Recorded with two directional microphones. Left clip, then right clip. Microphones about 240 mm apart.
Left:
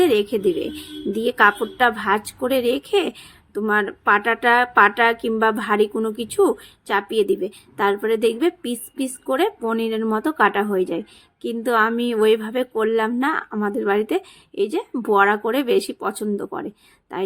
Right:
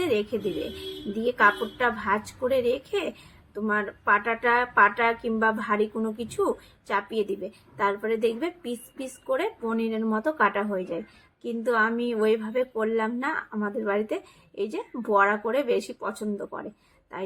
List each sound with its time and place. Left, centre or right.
0.0 s a woman's voice: left